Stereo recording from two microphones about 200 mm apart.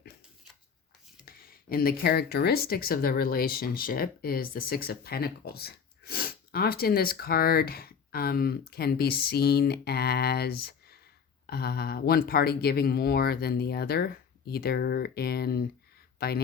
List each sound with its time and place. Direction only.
1.2 s speech: 45° left (ahead or behind)